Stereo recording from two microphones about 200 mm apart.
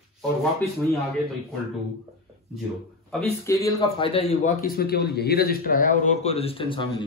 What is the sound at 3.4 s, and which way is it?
A man's voice, 15° left (ahead or behind).